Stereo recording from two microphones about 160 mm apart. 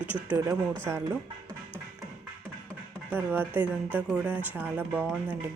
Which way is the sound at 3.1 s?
15° right (ahead or behind).